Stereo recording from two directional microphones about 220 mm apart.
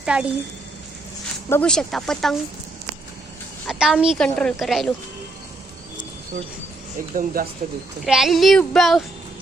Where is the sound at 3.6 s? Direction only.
5° right (ahead or behind).